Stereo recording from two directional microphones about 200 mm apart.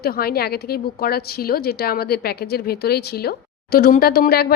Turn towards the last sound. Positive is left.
turn(degrees=50)  # may be behind; listen again after turning